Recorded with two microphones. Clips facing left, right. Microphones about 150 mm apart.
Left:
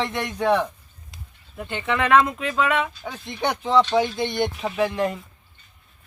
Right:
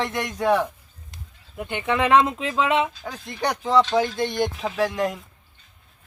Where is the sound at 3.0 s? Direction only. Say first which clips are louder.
Left 1 dB; centre (ahead or behind).